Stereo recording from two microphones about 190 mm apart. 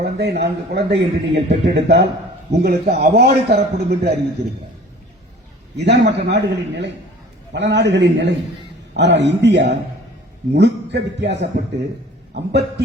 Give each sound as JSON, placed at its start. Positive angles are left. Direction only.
{"t": 0.0, "sound": "speech", "side_deg": -60}
{"t": 5.7, "sound": "a man's voice", "side_deg": -65}